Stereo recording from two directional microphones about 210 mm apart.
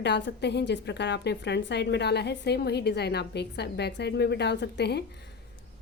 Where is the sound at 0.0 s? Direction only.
55° left (ahead or behind).